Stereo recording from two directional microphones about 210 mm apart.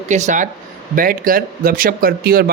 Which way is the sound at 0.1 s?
35° right (ahead or behind).